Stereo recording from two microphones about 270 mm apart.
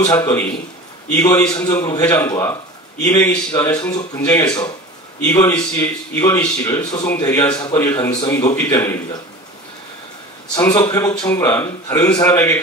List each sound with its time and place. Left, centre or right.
0.0 s a man's voice: centre
10.5 s a man's voice: centre